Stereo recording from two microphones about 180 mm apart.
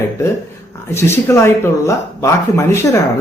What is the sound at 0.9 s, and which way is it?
Speech, 15° left (ahead or behind).